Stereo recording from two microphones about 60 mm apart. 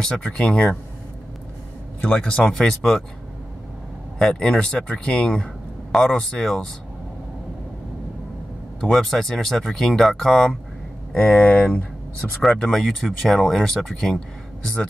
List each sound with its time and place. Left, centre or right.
0.0 s speech: centre
2.0 s speech: centre
4.2 s speech: centre
5.9 s a sound: centre
6.1 s speech: centre
8.8 s speech: centre
11.1 s speech: left
12.7 s speech: centre